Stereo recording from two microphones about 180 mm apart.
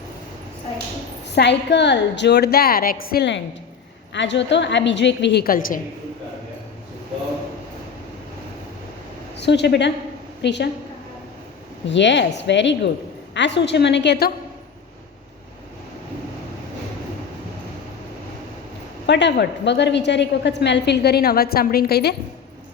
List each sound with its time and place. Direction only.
1.3 s a woman's voice: 70° left (ahead or behind); by 5.8 s 50° left (ahead or behind)
9.3 s a woman's voice: 70° left (ahead or behind)
11.9 s a woman's voice: 80° left
19.0 s a woman's voice: 75° left (ahead or behind)